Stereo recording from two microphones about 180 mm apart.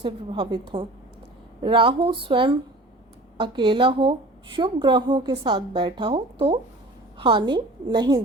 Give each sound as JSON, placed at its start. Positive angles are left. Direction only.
{"t": 0.0, "sound": "a woman's voice", "side_deg": -30}